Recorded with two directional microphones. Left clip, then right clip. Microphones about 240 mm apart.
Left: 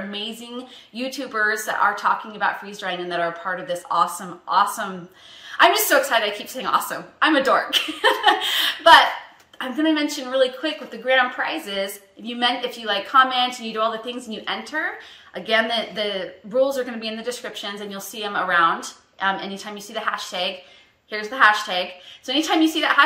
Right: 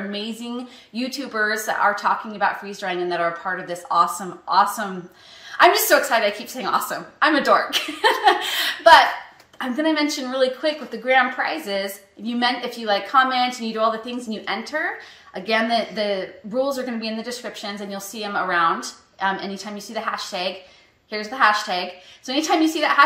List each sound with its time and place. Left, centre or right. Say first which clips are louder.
0.1 s a woman's voice: right 1 dB; centre